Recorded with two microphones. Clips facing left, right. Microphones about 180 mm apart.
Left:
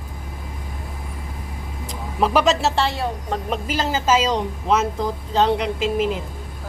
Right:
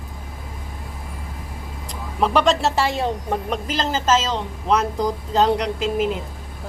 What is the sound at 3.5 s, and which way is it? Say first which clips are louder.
Speech: left 3 dB; 10° left (ahead or behind).